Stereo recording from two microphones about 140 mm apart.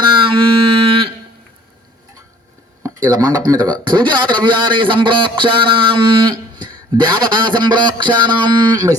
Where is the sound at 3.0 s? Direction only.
30° right (ahead or behind).